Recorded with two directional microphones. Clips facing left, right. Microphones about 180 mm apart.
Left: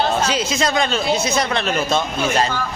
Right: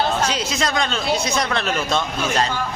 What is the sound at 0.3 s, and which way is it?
Speech, centre (ahead or behind).